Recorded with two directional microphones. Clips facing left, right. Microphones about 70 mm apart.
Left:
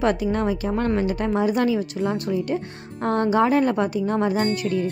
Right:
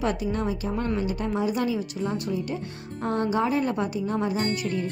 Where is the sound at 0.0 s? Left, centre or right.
Left.